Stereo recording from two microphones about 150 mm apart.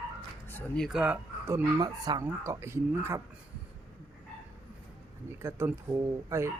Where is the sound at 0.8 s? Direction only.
5° right (ahead or behind).